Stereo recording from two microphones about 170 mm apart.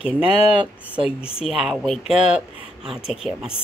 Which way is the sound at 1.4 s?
5° right (ahead or behind).